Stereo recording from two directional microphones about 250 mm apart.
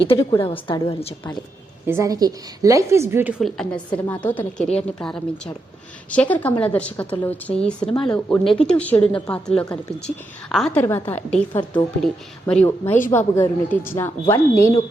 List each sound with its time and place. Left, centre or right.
0.0 s a woman's voice: left
1.9 s a woman's voice: centre